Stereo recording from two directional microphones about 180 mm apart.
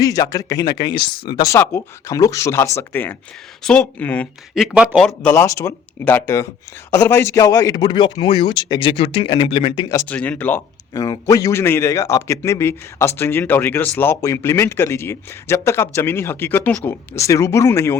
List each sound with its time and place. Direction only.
0.0 s a man's voice: 20° left (ahead or behind)
4.5 s speech: 5° right (ahead or behind)
5.3 s a man's voice: 15° left (ahead or behind); by 9.8 s 30° left (ahead or behind)
10.1 s a man's voice: 10° left (ahead or behind)